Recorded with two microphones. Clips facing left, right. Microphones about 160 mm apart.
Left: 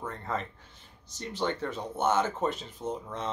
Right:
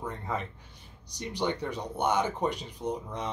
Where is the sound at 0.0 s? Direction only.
15° right (ahead or behind).